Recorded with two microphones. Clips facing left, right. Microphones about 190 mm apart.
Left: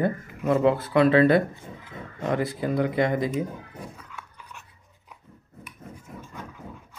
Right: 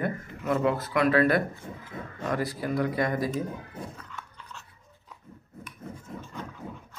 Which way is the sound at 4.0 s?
10° left (ahead or behind).